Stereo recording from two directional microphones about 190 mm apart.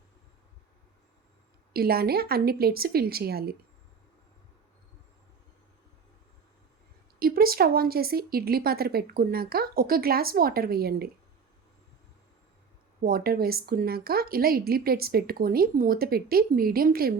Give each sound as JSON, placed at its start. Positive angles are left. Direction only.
{"t": 1.7, "sound": "speech", "side_deg": -55}
{"t": 7.2, "sound": "a woman's voice", "side_deg": -50}
{"t": 13.0, "sound": "a woman's voice", "side_deg": -50}